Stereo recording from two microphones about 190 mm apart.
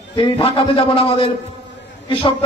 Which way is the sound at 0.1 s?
25° left (ahead or behind).